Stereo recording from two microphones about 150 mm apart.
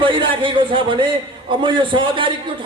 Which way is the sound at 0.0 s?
35° right (ahead or behind).